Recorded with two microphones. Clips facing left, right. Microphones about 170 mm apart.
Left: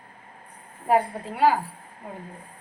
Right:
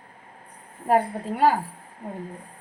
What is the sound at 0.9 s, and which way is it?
Speech, 45° right (ahead or behind).